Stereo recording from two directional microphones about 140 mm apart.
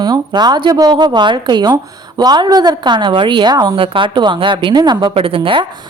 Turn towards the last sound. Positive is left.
turn(degrees=-40)  # may be behind; listen again after turning